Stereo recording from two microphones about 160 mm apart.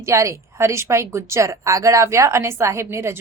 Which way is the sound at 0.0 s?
20° right (ahead or behind).